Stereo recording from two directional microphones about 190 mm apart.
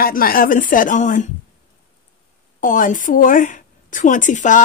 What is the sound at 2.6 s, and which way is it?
Speech, 45° left (ahead or behind).